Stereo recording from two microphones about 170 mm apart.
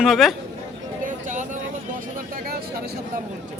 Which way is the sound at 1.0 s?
45° right (ahead or behind).